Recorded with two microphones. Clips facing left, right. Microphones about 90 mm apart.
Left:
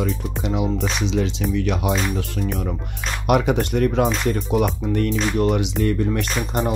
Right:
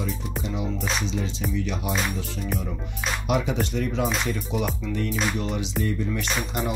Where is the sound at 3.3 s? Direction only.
60° left (ahead or behind).